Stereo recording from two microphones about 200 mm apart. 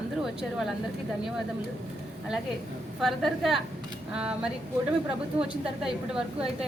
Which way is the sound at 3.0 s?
Centre (ahead or behind).